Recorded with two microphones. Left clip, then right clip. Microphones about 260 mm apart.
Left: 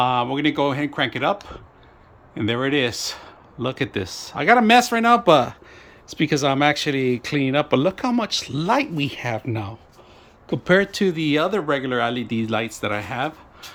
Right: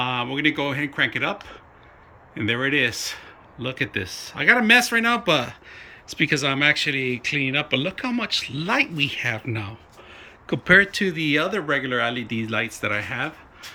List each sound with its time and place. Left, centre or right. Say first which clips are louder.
0.0 s speech: left 3 dB; centre